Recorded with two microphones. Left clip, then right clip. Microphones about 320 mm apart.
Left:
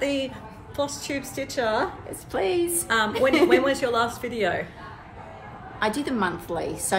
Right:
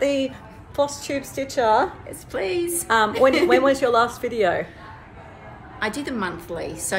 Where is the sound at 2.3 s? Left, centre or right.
Centre.